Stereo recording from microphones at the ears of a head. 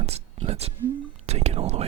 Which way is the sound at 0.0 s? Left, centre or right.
Right.